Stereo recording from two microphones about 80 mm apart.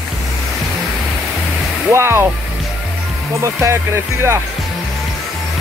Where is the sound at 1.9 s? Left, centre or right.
Right.